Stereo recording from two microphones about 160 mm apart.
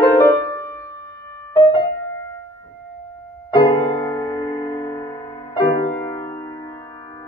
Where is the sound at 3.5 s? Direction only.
25° left (ahead or behind).